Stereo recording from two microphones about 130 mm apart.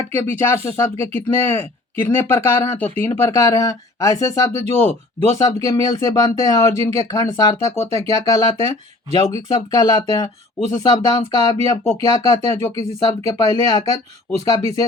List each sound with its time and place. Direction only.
0.1 s speech: 15° left (ahead or behind)
5.4 s speech: 25° left (ahead or behind)